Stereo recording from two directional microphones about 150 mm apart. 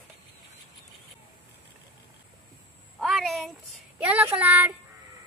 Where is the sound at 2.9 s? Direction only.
Centre (ahead or behind).